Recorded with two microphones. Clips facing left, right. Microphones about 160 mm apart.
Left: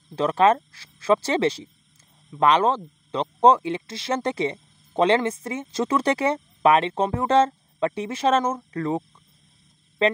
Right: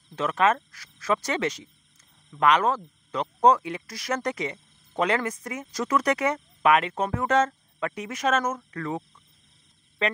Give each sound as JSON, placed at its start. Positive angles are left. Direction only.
{"t": 0.1, "sound": "speech", "side_deg": 30}